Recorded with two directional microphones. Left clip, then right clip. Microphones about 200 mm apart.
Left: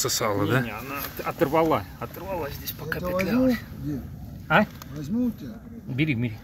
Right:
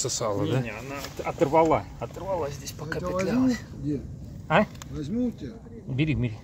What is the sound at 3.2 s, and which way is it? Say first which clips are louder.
Speech: left 2 dB; 15° right (ahead or behind).